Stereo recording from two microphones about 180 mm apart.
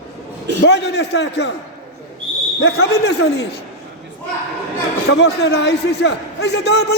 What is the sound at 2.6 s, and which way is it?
A man's voice, 70° left (ahead or behind).